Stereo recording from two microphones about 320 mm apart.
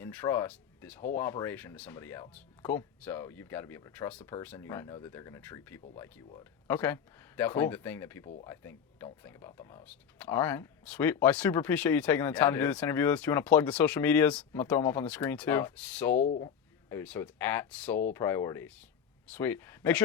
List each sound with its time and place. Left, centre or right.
0.0 s speech: centre
16.1 s speech: left
16.9 s speech: centre